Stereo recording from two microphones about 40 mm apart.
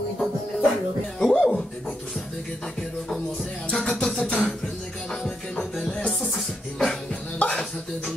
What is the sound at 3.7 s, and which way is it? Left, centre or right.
Music, left.